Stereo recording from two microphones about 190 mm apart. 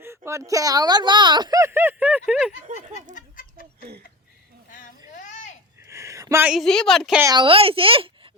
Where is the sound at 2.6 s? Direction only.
40° right (ahead or behind).